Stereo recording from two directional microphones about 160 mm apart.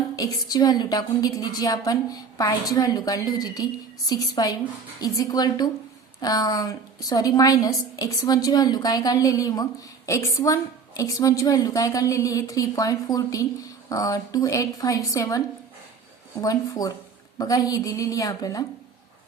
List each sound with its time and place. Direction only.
0.2 s a woman's voice: 25° left (ahead or behind)